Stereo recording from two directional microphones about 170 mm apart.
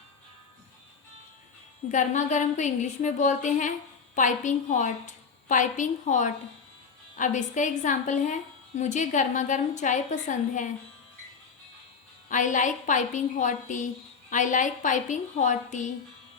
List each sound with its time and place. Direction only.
1.9 s a woman's voice: 45° left (ahead or behind)
12.3 s a woman's voice: 50° left (ahead or behind)